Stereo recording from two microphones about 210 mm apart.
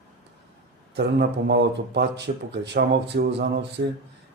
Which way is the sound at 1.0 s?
50° right (ahead or behind).